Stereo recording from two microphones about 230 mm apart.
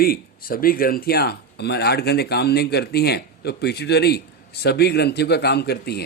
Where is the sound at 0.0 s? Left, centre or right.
Left.